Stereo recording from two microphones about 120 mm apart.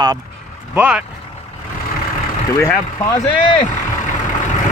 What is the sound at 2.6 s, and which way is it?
Speech, 25° left (ahead or behind).